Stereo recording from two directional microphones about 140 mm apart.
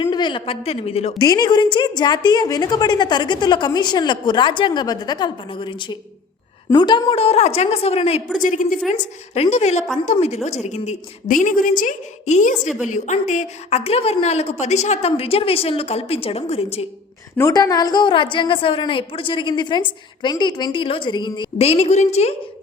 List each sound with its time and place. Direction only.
0.0 s a woman's voice: 35° left (ahead or behind)
1.2 s a woman's voice: 30° left (ahead or behind); by 8.2 s 45° left (ahead or behind)
8.4 s a woman's voice: 70° left (ahead or behind)
8.9 s a woman's voice: 50° left (ahead or behind)
17.5 s a woman's voice: 25° left (ahead or behind); by 22.4 s 50° left (ahead or behind)